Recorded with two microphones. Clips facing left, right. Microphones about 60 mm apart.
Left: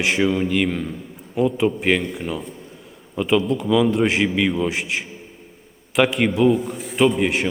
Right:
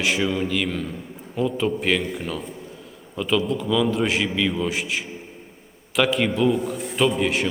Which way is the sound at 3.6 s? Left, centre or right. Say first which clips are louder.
Left 4 dB; centre.